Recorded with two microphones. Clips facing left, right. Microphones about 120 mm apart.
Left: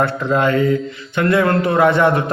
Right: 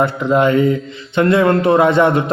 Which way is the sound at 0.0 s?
15° right (ahead or behind).